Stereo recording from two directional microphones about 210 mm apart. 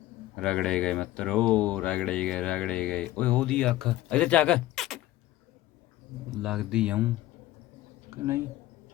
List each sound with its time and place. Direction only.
0.3 s speech: 5° left (ahead or behind)
6.3 s speech: centre (ahead or behind)
8.1 s speech: 10° right (ahead or behind)